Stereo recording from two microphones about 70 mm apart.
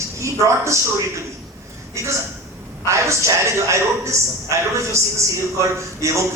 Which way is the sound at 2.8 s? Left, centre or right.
Right.